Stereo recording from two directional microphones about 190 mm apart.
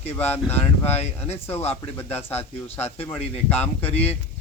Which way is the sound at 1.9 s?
10° left (ahead or behind).